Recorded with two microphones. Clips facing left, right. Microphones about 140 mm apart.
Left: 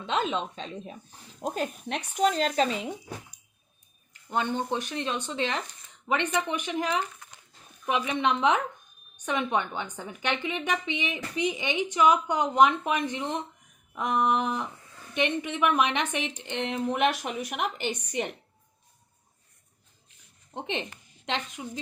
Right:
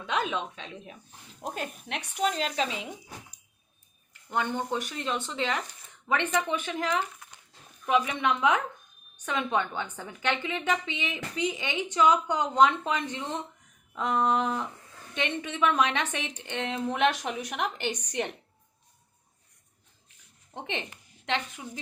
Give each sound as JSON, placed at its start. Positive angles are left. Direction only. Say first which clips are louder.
{"t": 0.0, "sound": "speech", "louder": "left 2 dB", "side_deg": 25}
{"t": 1.4, "sound": "a woman's voice", "louder": "left 4 dB", "side_deg": 10}
{"t": 1.9, "sound": "speech", "louder": "left 3 dB", "side_deg": 40}
{"t": 4.3, "sound": "a woman's voice", "louder": "left 1 dB", "side_deg": 20}
{"t": 20.5, "sound": "speech", "louder": "left 3 dB", "side_deg": 20}